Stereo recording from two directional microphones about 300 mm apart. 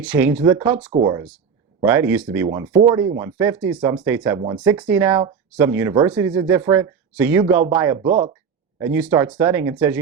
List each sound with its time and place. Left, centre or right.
0.0 s speech: centre
0.9 s speech: right
1.8 s speech: centre
8.0 s speech: right
8.8 s speech: centre